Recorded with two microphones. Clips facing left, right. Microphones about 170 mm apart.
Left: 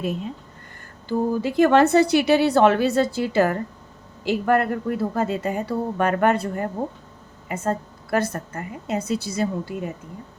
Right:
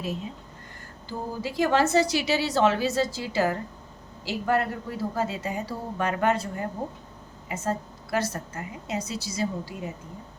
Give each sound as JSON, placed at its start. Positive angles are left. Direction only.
{"t": 1.0, "sound": "a woman's voice", "side_deg": 60}